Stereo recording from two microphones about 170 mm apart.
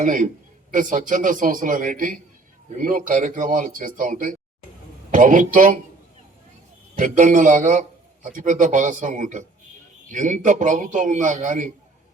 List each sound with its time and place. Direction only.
0.0 s a man's voice: 50° right (ahead or behind)
6.9 s a man's voice: 45° right (ahead or behind)